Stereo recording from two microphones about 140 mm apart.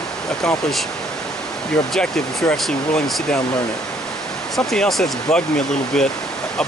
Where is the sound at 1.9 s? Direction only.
5° left (ahead or behind).